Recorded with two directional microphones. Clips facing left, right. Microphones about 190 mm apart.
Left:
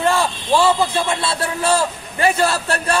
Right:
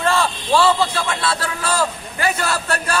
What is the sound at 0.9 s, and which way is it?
A man's voice, 25° left (ahead or behind).